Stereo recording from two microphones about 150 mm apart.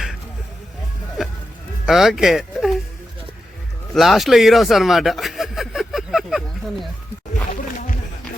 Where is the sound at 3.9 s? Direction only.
Centre (ahead or behind).